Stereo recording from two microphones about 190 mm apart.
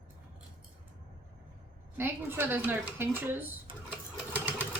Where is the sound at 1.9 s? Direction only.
10° right (ahead or behind).